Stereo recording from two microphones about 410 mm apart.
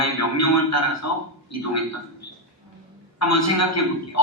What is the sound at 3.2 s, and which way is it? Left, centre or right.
A man's voice, left.